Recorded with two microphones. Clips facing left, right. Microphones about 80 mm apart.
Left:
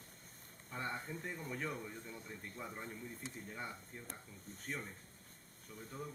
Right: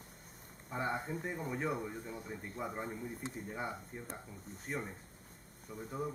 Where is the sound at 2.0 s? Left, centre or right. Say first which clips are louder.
Right 5 dB; centre.